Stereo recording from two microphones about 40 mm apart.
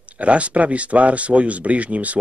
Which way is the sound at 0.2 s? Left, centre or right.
Right.